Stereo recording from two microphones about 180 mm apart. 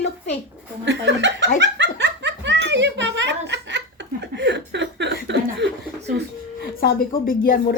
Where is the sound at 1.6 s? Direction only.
80° right.